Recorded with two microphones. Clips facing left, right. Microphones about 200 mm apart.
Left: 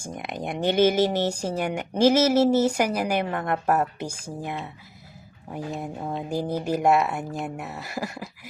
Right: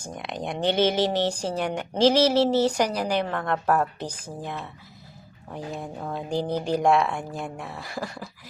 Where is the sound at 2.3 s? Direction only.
45° left (ahead or behind).